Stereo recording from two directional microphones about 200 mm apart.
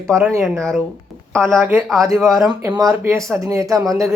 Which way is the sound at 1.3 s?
5° left (ahead or behind).